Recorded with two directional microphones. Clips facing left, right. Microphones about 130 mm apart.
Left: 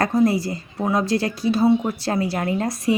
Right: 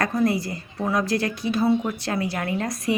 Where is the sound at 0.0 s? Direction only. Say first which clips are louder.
Left 4 dB; 25° left (ahead or behind).